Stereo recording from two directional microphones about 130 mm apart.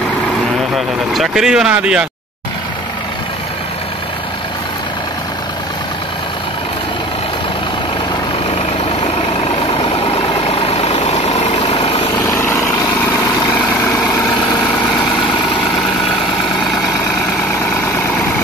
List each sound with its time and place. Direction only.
0.7 s speech: centre (ahead or behind)
10.0 s vehicle: 45° left (ahead or behind)